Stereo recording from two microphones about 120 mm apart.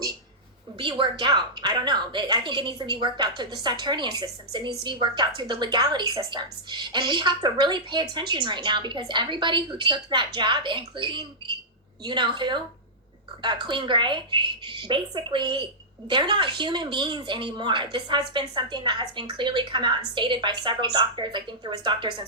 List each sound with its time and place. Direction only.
0.8 s a woman's voice: 45° right (ahead or behind)